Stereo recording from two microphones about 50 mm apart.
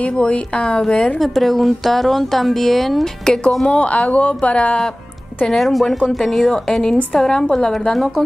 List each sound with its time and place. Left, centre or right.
0.0 s a woman's voice: left
1.2 s speech: centre
3.6 s a woman's voice: left
5.5 s a woman's voice: centre